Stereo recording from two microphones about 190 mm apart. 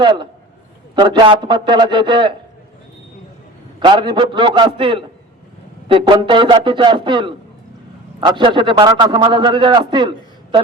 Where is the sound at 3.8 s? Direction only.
25° right (ahead or behind).